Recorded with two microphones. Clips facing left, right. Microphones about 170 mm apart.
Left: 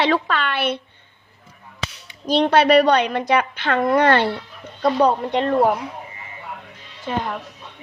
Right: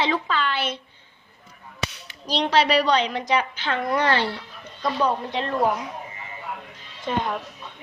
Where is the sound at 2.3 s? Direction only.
55° left (ahead or behind).